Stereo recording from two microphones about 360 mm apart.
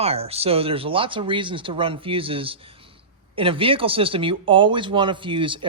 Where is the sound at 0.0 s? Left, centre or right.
Centre.